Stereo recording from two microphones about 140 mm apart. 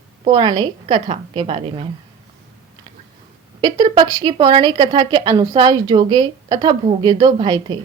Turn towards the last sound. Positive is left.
turn(degrees=-35)  # may be behind; listen again after turning